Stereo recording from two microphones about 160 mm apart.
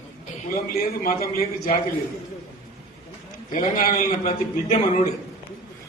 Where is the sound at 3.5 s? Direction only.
55° left (ahead or behind).